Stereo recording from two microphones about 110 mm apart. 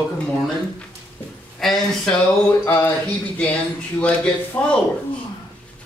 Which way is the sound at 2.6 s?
20° left (ahead or behind).